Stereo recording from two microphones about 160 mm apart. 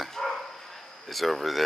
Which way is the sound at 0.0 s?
Centre (ahead or behind).